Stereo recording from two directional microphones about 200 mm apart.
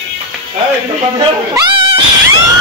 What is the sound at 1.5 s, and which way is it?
Cat, 25° right (ahead or behind).